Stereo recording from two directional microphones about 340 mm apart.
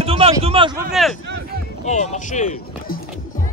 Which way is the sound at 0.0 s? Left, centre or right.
Centre.